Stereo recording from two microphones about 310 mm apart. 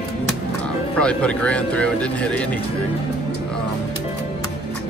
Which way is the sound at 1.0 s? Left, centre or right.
Centre.